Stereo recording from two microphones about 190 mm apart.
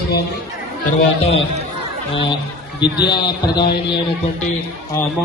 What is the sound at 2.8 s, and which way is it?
Speech, 25° left (ahead or behind).